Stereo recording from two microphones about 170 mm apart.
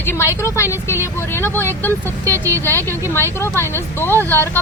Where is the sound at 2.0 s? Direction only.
20° right (ahead or behind).